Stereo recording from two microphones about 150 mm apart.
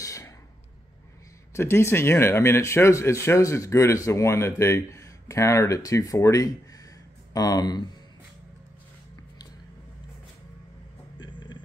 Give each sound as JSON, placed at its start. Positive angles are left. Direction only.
{"t": 0.0, "sound": "a sound", "side_deg": 20}
{"t": 1.5, "sound": "speech", "side_deg": 15}
{"t": 11.1, "sound": "vehicle", "side_deg": 30}